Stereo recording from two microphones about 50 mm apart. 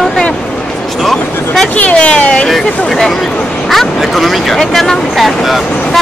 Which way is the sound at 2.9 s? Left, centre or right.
Centre.